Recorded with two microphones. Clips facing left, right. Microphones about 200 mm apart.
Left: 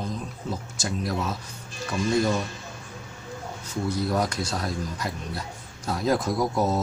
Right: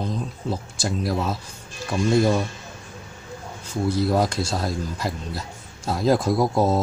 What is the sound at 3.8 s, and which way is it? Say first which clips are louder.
Speech: right 5 dB; 30° right (ahead or behind).